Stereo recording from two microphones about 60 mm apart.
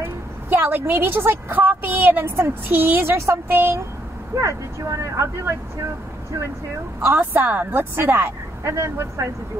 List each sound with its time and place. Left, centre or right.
0.5 s a woman's voice: right
4.8 s speech: right
7.2 s speech: right